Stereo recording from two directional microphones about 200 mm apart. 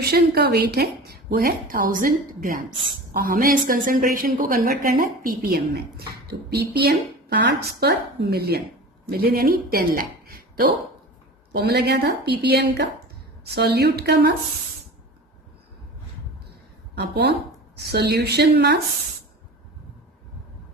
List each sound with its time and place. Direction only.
0.0 s a woman's voice: 50° right (ahead or behind)
16.9 s a woman's voice: 55° right (ahead or behind)